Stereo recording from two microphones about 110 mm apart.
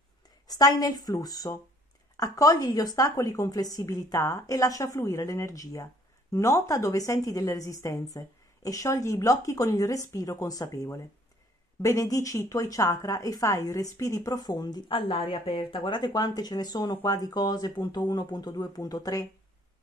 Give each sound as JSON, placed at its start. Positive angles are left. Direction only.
{"t": 0.5, "sound": "a woman's voice", "side_deg": 35}